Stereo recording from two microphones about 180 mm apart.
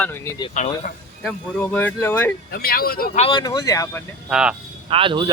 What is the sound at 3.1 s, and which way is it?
Speech, 30° left (ahead or behind).